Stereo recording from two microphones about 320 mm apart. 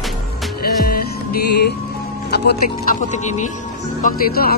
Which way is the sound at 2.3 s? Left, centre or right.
Left.